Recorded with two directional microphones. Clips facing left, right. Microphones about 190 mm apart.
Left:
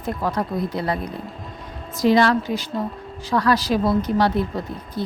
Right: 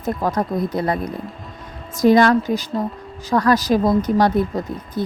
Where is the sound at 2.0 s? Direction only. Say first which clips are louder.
Right 4 dB; 45° right (ahead or behind).